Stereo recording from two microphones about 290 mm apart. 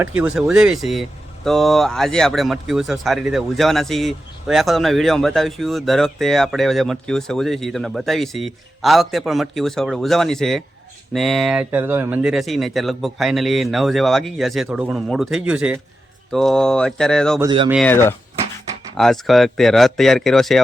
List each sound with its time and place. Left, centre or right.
0.2 s speech: centre
17.4 s speech: centre
17.7 s speech: centre